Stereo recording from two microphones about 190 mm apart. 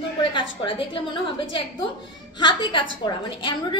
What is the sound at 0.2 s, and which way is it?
Speech, 25° left (ahead or behind).